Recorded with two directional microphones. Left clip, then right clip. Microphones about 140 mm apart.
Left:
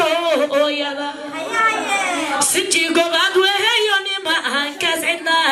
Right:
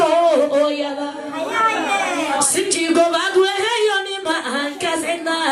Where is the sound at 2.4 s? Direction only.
20° left (ahead or behind).